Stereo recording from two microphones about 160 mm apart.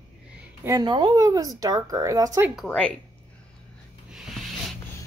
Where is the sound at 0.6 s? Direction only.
20° right (ahead or behind).